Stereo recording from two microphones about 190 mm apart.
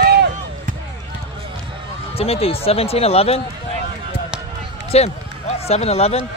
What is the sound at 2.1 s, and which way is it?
Speech, 30° left (ahead or behind).